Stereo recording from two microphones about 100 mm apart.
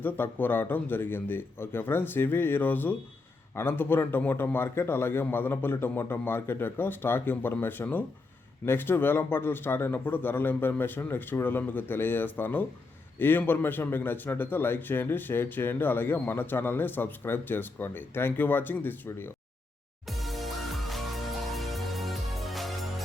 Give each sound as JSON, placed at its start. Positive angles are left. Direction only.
{"t": 0.0, "sound": "a man's voice", "side_deg": 20}
{"t": 20.1, "sound": "music", "side_deg": 0}